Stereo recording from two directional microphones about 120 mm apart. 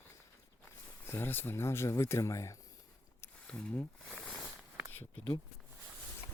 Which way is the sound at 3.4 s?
10° left (ahead or behind).